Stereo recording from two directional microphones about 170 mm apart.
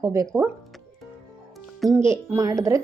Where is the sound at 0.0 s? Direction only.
20° right (ahead or behind).